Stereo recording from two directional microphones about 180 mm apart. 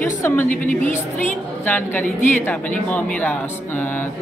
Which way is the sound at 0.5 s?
45° left (ahead or behind).